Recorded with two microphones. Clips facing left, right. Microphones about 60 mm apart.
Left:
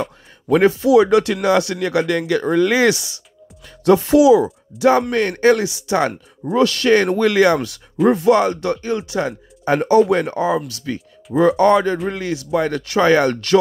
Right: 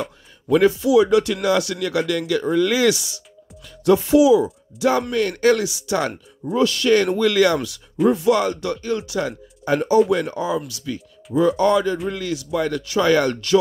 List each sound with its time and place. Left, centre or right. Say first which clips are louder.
0.0 s speech: left 4 dB; left
3.6 s speech: left 3 dB; left
5.1 s speech: left 3 dB; left
6.4 s speech: left 3 dB; left
6.9 s speech: left 2 dB; left
7.2 s speech: left 3 dB; left
8.1 s speech: left 5 dB; left
9.8 s speech: left 3 dB; left
13.1 s speech: left 2 dB; left